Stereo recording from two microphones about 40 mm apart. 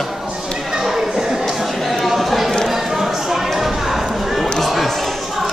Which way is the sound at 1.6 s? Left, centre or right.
Centre.